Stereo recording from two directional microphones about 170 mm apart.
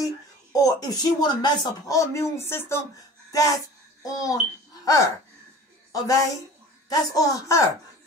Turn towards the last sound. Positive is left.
turn(degrees=20)  # may be behind; listen again after turning